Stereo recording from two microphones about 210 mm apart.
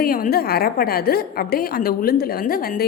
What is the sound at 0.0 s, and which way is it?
A woman's voice, 45° left (ahead or behind).